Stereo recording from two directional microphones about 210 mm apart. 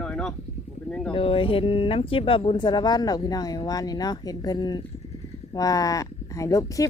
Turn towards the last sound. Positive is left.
turn(degrees=15)  # may be behind; listen again after turning